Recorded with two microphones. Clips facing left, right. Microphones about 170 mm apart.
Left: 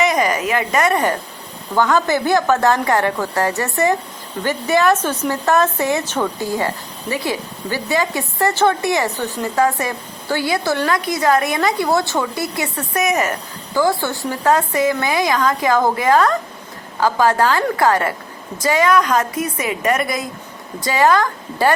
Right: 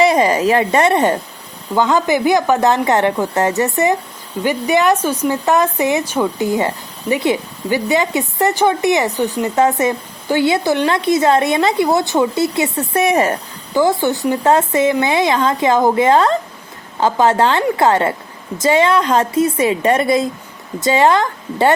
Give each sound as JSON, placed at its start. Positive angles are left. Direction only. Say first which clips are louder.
{"t": 0.0, "sound": "speech", "louder": "right 5 dB", "side_deg": -30}
{"t": 13.7, "sound": "speech", "louder": "right 3 dB", "side_deg": -20}